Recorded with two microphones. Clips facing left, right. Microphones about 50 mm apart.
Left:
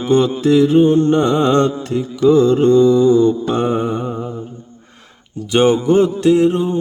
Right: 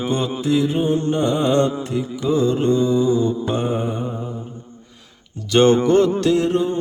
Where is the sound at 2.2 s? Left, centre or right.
Left.